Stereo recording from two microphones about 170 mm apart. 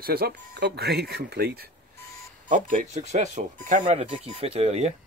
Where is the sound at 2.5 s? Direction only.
50° right (ahead or behind).